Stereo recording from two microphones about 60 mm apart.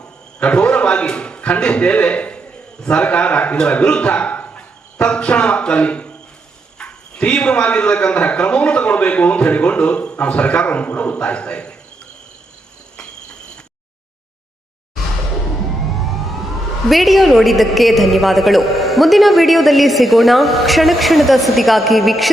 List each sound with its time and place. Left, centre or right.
0.0 s a sound: centre
2.8 s a man's voice: centre
16.9 s a woman's voice: centre